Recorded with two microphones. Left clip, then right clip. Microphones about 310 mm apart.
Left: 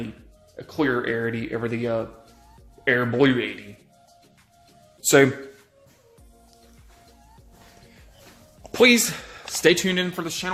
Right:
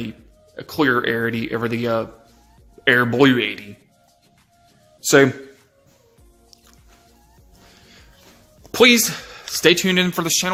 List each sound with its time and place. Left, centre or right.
0.5 s speech: right
4.9 s speech: centre
8.7 s speech: centre; by 10.5 s right